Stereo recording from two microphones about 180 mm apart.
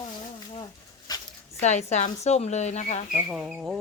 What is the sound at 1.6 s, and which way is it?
Speech, 40° left (ahead or behind).